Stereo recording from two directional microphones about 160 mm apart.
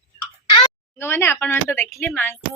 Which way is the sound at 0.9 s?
15° left (ahead or behind).